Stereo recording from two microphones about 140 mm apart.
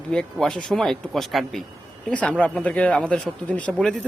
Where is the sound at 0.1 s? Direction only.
5° left (ahead or behind).